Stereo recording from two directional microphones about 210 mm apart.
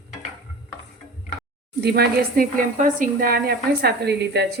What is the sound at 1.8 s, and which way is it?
Speech, 50° right (ahead or behind).